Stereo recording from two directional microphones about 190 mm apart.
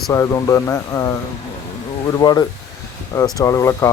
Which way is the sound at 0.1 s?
15° left (ahead or behind).